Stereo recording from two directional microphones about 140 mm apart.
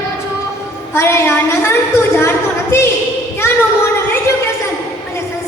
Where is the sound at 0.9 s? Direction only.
20° left (ahead or behind).